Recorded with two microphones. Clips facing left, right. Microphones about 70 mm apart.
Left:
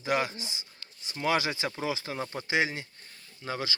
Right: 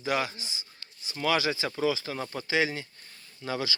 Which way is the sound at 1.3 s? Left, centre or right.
Left.